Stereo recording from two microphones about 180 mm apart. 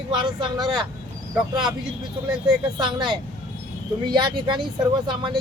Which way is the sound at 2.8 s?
25° right (ahead or behind).